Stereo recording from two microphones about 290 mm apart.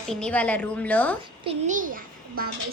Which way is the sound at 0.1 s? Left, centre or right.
Centre.